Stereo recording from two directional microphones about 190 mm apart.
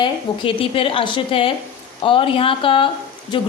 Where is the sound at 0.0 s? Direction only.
30° left (ahead or behind).